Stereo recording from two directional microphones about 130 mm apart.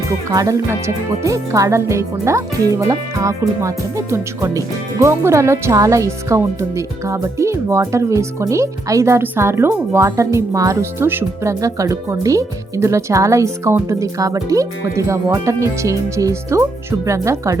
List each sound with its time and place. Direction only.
0.3 s speech: 25° right (ahead or behind)